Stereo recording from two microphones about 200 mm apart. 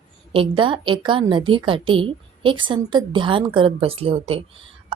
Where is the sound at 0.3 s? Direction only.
25° right (ahead or behind).